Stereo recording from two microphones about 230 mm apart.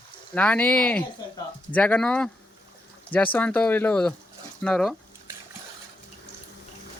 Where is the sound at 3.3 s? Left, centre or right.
Centre.